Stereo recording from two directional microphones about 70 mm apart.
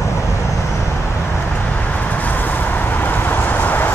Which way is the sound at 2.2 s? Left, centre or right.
Left.